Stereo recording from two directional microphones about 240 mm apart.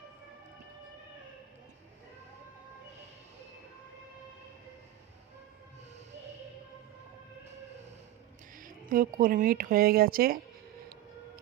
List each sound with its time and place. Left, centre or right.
8.5 s speech: right